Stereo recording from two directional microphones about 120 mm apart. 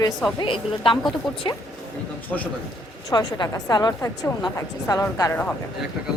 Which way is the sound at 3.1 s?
35° left (ahead or behind).